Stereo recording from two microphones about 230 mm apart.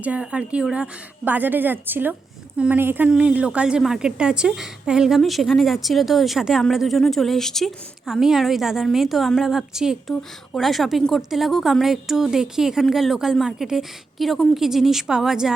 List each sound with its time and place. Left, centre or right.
0.0 s a woman's voice: centre